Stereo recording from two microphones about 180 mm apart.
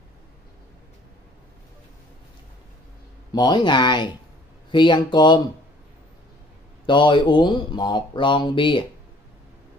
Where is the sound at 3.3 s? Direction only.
25° left (ahead or behind).